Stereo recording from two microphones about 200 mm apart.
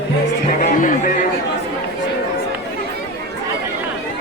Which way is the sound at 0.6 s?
40° left (ahead or behind).